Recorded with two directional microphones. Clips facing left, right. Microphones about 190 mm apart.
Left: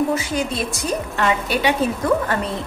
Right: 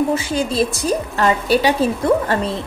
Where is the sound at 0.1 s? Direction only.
30° right (ahead or behind).